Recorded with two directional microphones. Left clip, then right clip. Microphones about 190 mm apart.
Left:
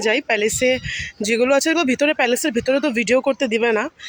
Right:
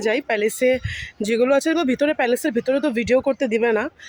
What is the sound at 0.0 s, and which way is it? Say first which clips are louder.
Speech: left 2 dB; 10° left (ahead or behind).